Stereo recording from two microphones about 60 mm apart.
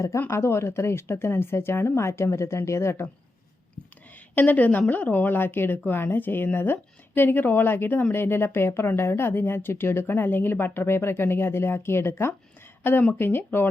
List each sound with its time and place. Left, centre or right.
0.3 s speech: left
4.4 s a woman's voice: left